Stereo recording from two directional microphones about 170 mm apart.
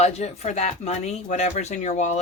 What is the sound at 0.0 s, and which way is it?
Speech, 40° left (ahead or behind).